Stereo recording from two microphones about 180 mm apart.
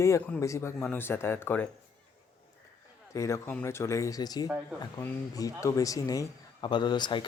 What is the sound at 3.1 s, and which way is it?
Speech, 15° left (ahead or behind).